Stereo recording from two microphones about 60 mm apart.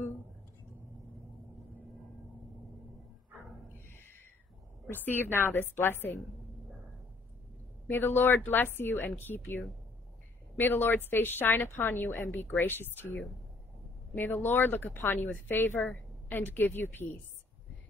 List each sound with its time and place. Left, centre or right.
3.7 s a sound: left
4.8 s speech: left
7.9 s speech: left